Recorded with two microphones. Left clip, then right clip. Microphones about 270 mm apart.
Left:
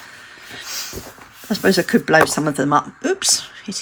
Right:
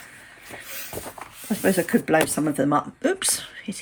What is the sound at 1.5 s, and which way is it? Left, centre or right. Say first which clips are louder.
Speech: left 5 dB; centre.